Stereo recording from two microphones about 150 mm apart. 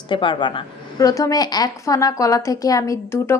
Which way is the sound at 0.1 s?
30° left (ahead or behind).